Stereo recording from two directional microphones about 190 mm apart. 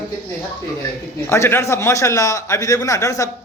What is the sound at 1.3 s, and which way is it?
A man's voice, 15° left (ahead or behind).